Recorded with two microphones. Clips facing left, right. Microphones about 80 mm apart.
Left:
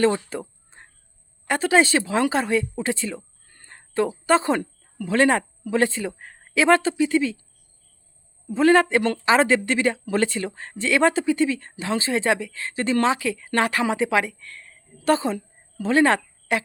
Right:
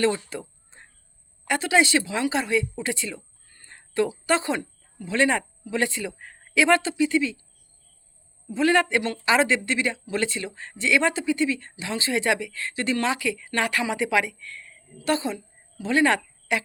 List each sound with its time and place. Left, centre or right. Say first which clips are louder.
0.0 s a sound: left 3 dB; left
1.5 s a man's voice: left 3 dB; left
8.4 s a man's voice: left 4 dB; left